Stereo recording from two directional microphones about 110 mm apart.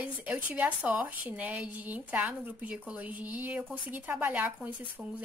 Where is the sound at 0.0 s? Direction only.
15° right (ahead or behind).